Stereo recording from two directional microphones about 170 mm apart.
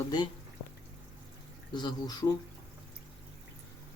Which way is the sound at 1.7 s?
25° left (ahead or behind).